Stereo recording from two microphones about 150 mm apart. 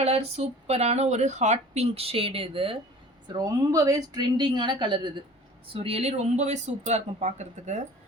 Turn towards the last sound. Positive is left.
turn(degrees=-50)  # may be behind; listen again after turning